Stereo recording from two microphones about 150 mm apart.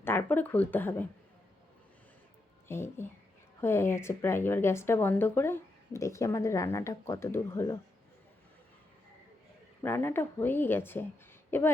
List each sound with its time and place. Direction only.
0.0 s speech: 15° left (ahead or behind)
2.6 s speech: 15° left (ahead or behind)
9.8 s speech: 15° left (ahead or behind)